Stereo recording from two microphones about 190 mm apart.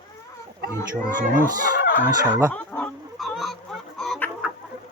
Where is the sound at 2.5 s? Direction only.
5° left (ahead or behind).